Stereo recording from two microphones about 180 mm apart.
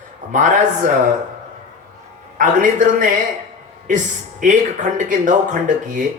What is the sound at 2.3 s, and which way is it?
Speech, 45° right (ahead or behind).